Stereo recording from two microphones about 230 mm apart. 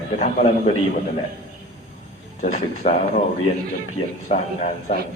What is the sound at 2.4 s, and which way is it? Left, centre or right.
Speech, left.